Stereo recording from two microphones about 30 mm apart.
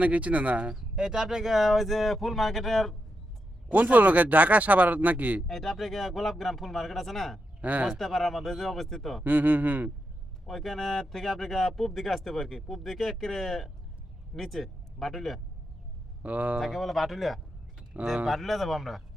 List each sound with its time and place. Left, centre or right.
0.0 s speech: right
0.8 s speech: right
1.5 s speech: centre
3.7 s speech: right
5.5 s speech: centre
7.6 s speech: right
7.9 s speech: centre
9.2 s speech: right
10.4 s speech: centre
16.2 s speech: right
16.7 s speech: centre
18.0 s speech: right
18.3 s speech: centre